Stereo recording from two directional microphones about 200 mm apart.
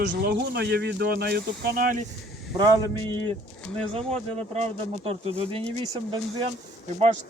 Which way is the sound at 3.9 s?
35° right (ahead or behind).